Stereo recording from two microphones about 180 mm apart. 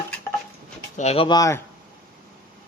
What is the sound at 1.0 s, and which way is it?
Speech, 35° left (ahead or behind).